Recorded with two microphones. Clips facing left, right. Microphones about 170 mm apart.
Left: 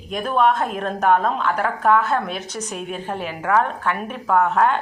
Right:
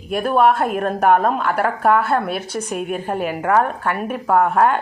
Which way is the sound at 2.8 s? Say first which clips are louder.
Right 5 dB; 55° right (ahead or behind).